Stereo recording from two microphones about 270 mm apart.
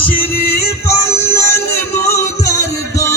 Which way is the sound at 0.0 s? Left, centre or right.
Centre.